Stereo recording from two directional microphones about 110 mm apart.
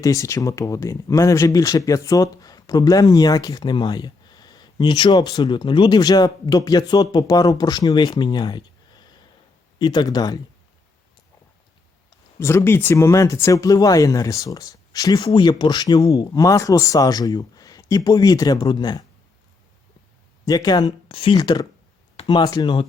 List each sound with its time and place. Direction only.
0.0 s speech: 30° left (ahead or behind)
12.4 s speech: 25° left (ahead or behind); by 19.0 s 40° left (ahead or behind)
20.4 s speech: 35° left (ahead or behind)